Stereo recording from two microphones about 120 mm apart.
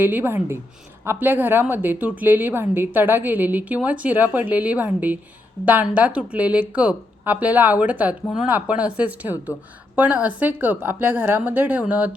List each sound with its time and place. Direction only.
0.0 s a woman's voice: 15° right (ahead or behind)